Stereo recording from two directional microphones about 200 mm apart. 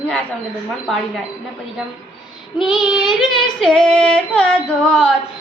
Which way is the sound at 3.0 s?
20° left (ahead or behind).